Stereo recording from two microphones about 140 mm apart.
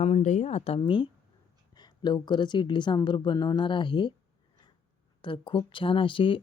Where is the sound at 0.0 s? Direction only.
55° left (ahead or behind); by 4.1 s 35° left (ahead or behind).